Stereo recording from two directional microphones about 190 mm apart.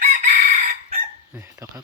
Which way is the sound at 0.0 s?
35° right (ahead or behind).